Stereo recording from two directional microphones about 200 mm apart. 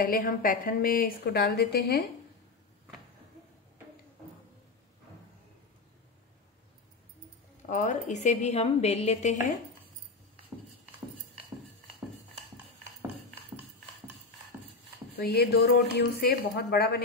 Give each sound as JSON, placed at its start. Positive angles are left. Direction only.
{"t": 0.0, "sound": "a woman's voice", "side_deg": 45}
{"t": 7.6, "sound": "a woman's voice", "side_deg": 40}
{"t": 15.1, "sound": "a woman's voice", "side_deg": 55}